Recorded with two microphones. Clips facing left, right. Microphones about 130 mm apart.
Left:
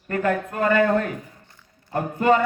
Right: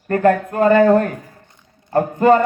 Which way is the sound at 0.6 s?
35° right (ahead or behind).